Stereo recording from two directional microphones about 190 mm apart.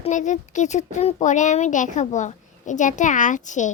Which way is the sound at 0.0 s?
40° left (ahead or behind).